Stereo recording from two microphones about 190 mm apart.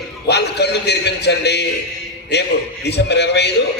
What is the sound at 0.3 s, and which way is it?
Music, 60° left (ahead or behind).